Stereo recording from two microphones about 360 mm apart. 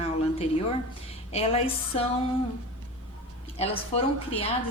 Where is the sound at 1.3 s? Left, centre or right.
Centre.